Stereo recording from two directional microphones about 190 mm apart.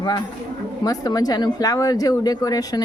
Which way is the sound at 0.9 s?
20° left (ahead or behind).